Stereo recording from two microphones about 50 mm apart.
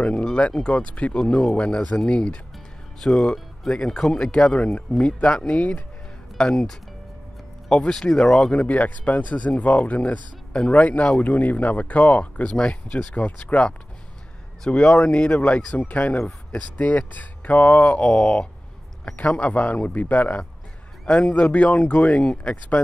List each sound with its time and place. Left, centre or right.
0.0 s speech: centre
6.5 s speech: centre
8.5 s speech: left
14.8 s speech: centre
15.7 s speech: left
17.9 s speech: centre
19.1 s speech: left
21.0 s a man's voice: centre